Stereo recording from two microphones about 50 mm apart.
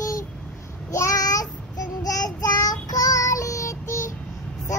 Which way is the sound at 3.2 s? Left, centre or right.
Left.